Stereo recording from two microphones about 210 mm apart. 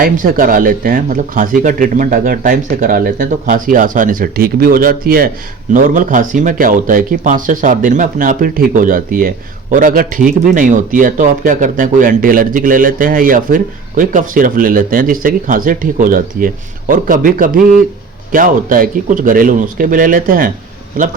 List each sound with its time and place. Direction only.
0.0 s a man's voice: 40° right (ahead or behind)